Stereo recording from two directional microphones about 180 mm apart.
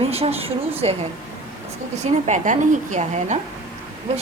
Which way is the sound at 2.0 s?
40° right (ahead or behind).